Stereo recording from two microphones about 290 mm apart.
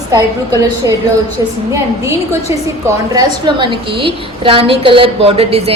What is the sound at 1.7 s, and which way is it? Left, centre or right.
A woman's voice, centre.